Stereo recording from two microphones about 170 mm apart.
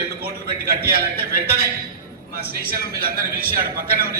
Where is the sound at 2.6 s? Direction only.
60° right (ahead or behind).